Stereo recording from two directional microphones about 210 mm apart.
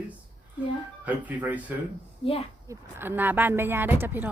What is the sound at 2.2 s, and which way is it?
Speech, 25° left (ahead or behind).